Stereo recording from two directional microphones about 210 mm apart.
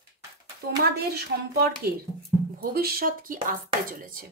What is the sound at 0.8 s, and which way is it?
Music, 50° right (ahead or behind).